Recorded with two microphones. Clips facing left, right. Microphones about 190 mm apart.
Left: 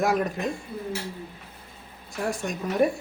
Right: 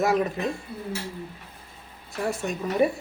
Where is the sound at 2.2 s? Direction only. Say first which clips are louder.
Right 1 dB; 5° right (ahead or behind).